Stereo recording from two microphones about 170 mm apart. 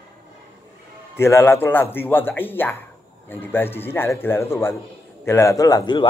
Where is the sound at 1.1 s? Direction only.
15° left (ahead or behind).